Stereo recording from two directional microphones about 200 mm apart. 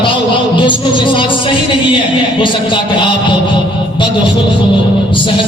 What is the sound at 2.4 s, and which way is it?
Music, 25° left (ahead or behind).